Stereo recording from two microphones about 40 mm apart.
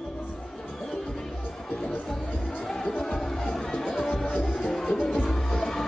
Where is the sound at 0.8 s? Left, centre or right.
Centre.